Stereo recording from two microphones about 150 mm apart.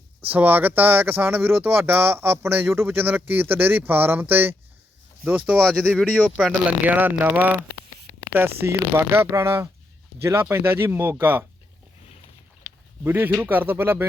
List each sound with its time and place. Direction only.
0.3 s speech: 10° right (ahead or behind)
5.6 s speech: 5° left (ahead or behind); by 7.6 s 10° right (ahead or behind)
8.6 s speech: 15° right (ahead or behind)
13.1 s speech: 15° right (ahead or behind)